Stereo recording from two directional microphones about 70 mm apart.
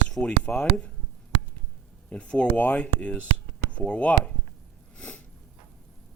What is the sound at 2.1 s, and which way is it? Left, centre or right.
Speech, centre.